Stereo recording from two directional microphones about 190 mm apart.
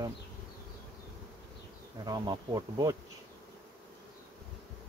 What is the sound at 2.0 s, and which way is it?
Bee, 20° right (ahead or behind).